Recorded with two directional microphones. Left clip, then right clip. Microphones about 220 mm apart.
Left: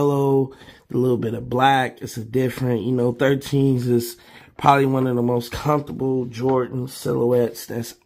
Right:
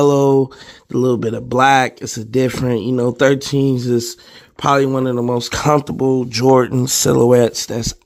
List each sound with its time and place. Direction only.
0.0 s a sound: 30° right (ahead or behind)
0.9 s speech: 25° right (ahead or behind); by 7.5 s 45° right (ahead or behind)
7.6 s speech: 30° right (ahead or behind)